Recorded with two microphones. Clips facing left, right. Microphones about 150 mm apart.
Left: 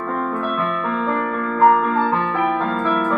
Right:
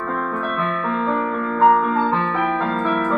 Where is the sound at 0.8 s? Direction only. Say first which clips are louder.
Even; centre (ahead or behind).